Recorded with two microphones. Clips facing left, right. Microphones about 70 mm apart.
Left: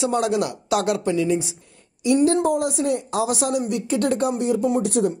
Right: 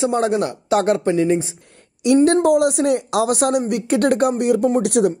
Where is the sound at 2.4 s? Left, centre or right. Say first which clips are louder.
Right 6 dB; right.